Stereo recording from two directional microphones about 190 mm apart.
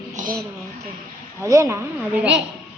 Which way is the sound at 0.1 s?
40° right (ahead or behind).